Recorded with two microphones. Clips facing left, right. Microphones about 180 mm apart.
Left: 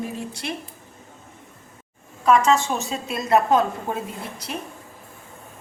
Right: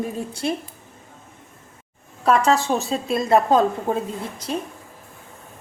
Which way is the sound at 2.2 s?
35° right (ahead or behind).